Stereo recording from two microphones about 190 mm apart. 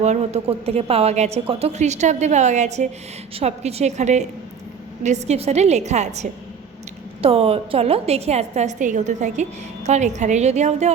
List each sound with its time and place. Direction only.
0.0 s a woman's voice: 35° right (ahead or behind)